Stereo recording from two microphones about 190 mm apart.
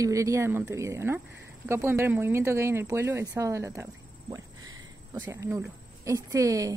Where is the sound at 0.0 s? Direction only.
15° right (ahead or behind).